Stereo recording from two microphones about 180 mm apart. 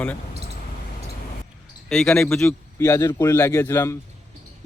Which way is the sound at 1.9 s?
5° left (ahead or behind).